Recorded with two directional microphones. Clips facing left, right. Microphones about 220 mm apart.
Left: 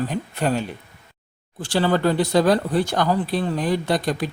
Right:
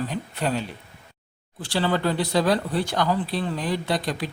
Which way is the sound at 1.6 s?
45° left (ahead or behind).